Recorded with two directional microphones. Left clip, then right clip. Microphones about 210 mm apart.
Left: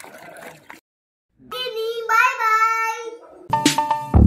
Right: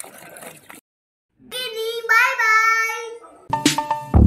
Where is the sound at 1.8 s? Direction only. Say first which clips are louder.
Right 1 dB; 10° left (ahead or behind).